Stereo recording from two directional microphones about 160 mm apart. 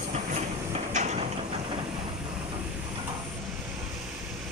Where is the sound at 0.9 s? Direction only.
45° right (ahead or behind).